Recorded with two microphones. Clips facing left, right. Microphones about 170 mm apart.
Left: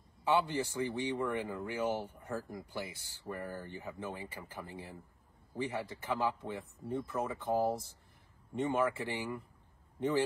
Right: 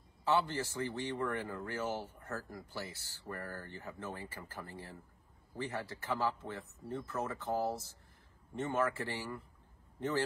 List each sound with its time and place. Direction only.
0.2 s a man's voice: 10° left (ahead or behind)